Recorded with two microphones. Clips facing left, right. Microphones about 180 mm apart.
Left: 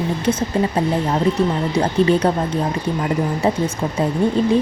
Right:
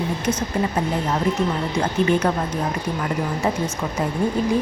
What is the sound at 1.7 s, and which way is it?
Speech, 30° left (ahead or behind).